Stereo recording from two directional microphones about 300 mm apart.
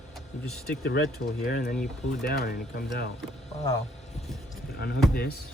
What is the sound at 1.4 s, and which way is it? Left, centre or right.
Speech, left.